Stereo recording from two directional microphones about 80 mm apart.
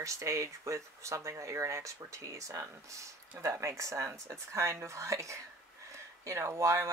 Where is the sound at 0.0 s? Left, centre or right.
Right.